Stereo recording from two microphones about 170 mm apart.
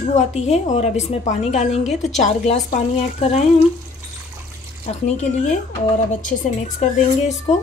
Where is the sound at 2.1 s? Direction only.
45° left (ahead or behind).